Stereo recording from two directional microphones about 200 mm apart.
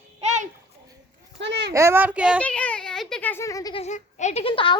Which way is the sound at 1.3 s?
60° right (ahead or behind).